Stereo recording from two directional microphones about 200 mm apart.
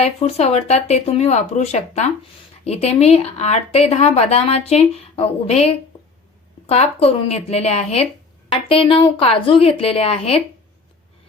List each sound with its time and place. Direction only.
0.0 s speech: 30° left (ahead or behind)